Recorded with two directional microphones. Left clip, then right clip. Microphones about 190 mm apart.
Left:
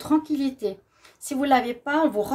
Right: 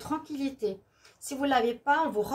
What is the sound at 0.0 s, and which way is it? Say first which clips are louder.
Speech: left 10 dB; 55° left (ahead or behind).